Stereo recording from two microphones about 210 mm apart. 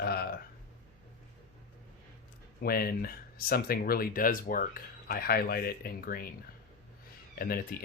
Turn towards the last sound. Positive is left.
turn(degrees=45)  # may be behind; listen again after turning